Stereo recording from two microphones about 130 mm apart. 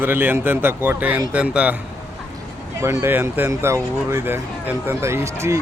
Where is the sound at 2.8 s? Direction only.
20° right (ahead or behind).